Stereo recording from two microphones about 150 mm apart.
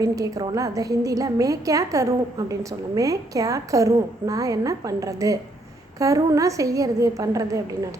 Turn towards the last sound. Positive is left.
turn(degrees=-20)  # may be behind; listen again after turning